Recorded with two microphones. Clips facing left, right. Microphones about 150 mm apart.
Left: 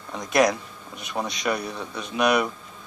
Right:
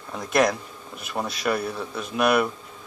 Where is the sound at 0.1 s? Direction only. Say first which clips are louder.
Left 1 dB; centre (ahead or behind).